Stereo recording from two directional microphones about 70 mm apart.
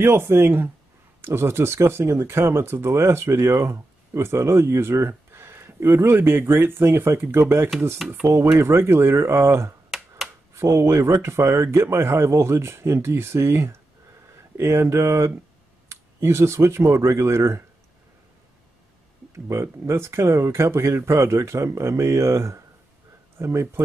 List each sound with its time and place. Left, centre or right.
0.0 s speech: right
9.8 s finger snapping: centre
10.5 s speech: right
19.3 s speech: right